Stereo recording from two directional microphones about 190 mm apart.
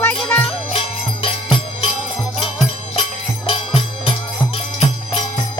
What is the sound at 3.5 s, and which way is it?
Music, 30° left (ahead or behind).